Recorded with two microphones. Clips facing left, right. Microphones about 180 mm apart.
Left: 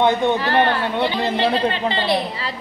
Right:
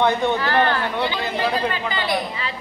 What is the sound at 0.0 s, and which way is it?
Speech, 20° left (ahead or behind).